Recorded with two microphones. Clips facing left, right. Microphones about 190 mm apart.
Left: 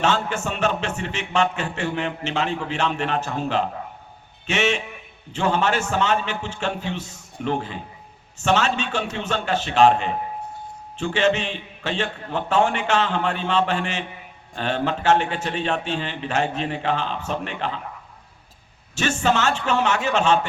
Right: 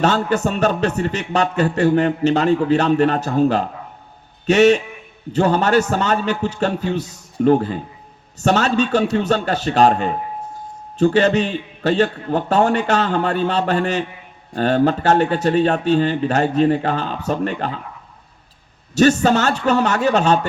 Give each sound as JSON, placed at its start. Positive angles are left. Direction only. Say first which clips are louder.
{"t": 0.0, "sound": "a man's voice", "louder": "right 6 dB", "side_deg": -40}
{"t": 18.9, "sound": "a man's voice", "louder": "right 8 dB", "side_deg": -40}